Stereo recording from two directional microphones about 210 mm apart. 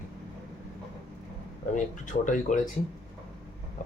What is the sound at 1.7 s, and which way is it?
Speech, 35° left (ahead or behind).